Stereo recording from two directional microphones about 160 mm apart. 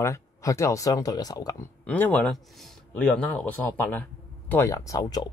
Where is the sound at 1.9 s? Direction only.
10° left (ahead or behind).